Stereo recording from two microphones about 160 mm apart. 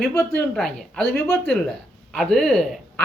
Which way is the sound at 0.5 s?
5° left (ahead or behind).